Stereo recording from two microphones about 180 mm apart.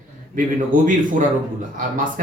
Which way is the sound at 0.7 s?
50° right (ahead or behind).